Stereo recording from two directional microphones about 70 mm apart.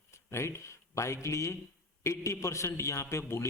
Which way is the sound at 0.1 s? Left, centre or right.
Left.